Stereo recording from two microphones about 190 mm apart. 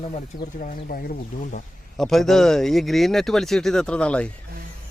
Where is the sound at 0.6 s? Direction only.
50° left (ahead or behind).